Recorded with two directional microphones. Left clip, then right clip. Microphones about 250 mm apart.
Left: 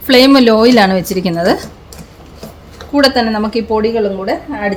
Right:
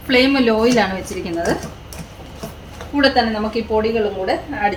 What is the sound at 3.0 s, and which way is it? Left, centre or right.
Speech, left.